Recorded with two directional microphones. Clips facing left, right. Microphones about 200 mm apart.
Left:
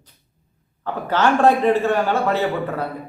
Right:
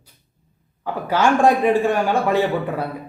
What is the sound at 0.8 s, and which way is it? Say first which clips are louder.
Speech: even; 10° right (ahead or behind).